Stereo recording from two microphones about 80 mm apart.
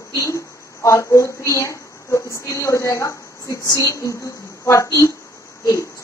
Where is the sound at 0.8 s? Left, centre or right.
Left.